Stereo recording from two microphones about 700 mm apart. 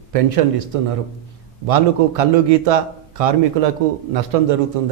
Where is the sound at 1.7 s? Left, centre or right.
Right.